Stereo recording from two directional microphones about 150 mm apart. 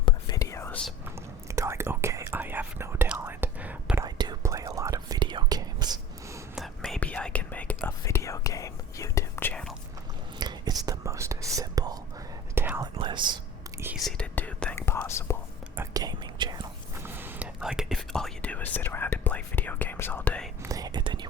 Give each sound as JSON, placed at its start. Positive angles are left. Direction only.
{"t": 0.0, "sound": "whispering", "side_deg": 25}
{"t": 1.5, "sound": "whispering", "side_deg": -20}
{"t": 4.0, "sound": "whispering", "side_deg": -25}
{"t": 6.6, "sound": "whispering", "side_deg": 5}
{"t": 10.4, "sound": "whispering", "side_deg": -25}
{"t": 12.5, "sound": "whispering", "side_deg": -15}
{"t": 13.0, "sound": "whispering", "side_deg": -30}
{"t": 14.0, "sound": "whispering", "side_deg": 10}
{"t": 15.7, "sound": "whispering", "side_deg": -20}
{"t": 17.0, "sound": "whispering", "side_deg": -15}
{"t": 20.6, "sound": "whispering", "side_deg": -25}